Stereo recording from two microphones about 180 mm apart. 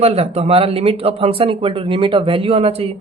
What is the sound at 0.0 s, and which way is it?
Speech, 35° right (ahead or behind).